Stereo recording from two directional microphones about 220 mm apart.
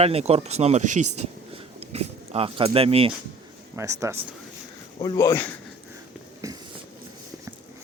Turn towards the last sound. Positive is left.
turn(degrees=-15)  # may be behind; listen again after turning